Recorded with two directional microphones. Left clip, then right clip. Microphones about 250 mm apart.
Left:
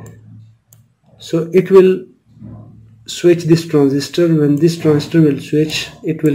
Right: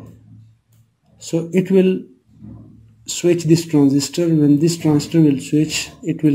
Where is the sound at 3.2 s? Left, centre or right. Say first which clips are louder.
Left 4 dB; centre.